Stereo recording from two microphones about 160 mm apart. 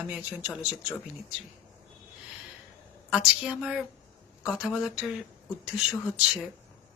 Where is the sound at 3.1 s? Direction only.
5° right (ahead or behind).